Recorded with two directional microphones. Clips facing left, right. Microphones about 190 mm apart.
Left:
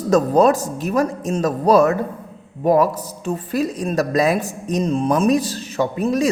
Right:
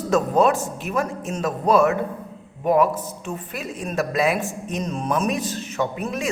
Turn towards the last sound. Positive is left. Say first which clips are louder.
# left 7 dB
turn(degrees=35)  # may be behind; listen again after turning